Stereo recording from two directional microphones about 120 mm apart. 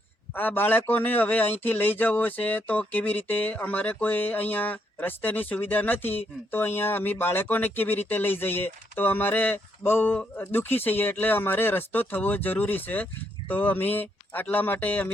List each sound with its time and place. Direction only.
0.3 s speech: 15° left (ahead or behind)